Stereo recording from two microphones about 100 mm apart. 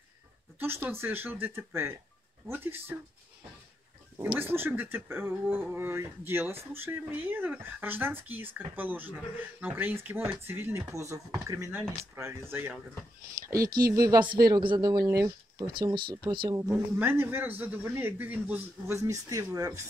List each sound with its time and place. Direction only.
0.6 s speech: 25° right (ahead or behind)
4.4 s speech: 20° right (ahead or behind)
13.4 s speech: 30° right (ahead or behind); by 16.5 s 50° right (ahead or behind)
16.5 s speech: 30° right (ahead or behind)
18.9 s speech: 35° right (ahead or behind)